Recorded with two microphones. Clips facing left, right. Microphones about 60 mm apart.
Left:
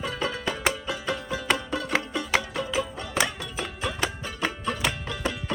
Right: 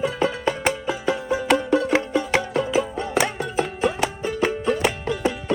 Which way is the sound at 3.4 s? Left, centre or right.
Right.